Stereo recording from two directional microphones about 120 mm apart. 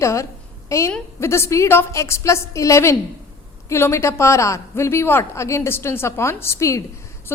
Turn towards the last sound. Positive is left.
turn(degrees=25)  # may be behind; listen again after turning